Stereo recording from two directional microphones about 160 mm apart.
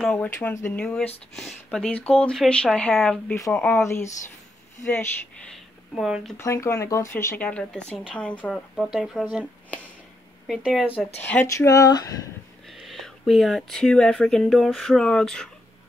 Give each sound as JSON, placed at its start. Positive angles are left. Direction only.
{"t": 0.0, "sound": "speech", "side_deg": 5}
{"t": 5.5, "sound": "a sound", "side_deg": 0}
{"t": 6.3, "sound": "speech", "side_deg": 15}
{"t": 10.4, "sound": "speech", "side_deg": 0}
{"t": 11.2, "sound": "speech", "side_deg": 15}
{"t": 12.7, "sound": "speech", "side_deg": 0}